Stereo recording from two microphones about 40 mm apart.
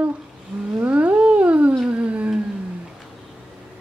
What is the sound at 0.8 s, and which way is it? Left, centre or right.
Cat, right.